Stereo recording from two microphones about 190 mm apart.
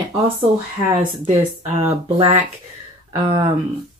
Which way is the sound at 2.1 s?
30° right (ahead or behind).